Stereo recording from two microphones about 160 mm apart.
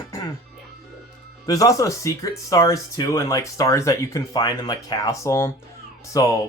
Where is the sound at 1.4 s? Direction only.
20° left (ahead or behind).